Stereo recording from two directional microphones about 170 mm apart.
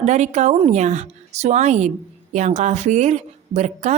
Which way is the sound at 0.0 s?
45° right (ahead or behind).